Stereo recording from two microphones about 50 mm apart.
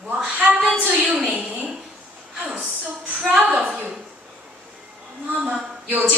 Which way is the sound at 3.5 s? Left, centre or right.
Right.